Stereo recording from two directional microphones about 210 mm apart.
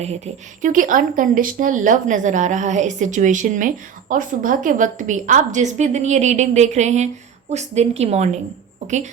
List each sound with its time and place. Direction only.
0.6 s a woman's voice: 40° right (ahead or behind)